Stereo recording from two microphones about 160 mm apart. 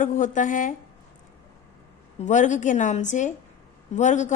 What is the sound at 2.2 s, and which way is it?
A woman's voice, 50° left (ahead or behind).